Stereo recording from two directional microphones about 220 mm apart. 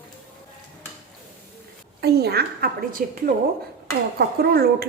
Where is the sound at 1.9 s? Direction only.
45° right (ahead or behind).